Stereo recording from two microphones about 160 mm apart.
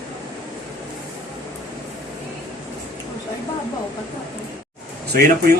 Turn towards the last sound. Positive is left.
turn(degrees=-80)